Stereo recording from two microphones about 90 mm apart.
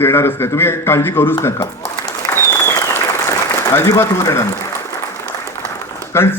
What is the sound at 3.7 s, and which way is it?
Speech, 30° left (ahead or behind).